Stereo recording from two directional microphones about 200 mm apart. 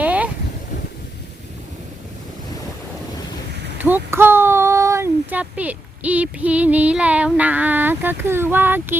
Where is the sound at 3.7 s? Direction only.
10° right (ahead or behind).